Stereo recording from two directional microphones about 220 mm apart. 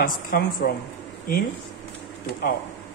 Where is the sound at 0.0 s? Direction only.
40° left (ahead or behind).